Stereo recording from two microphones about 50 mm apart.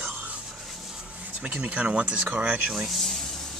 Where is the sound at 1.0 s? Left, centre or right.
Right.